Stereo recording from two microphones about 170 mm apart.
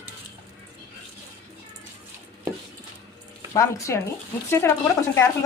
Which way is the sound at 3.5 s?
20° left (ahead or behind).